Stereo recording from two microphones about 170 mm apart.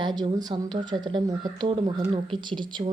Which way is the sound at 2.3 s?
25° right (ahead or behind).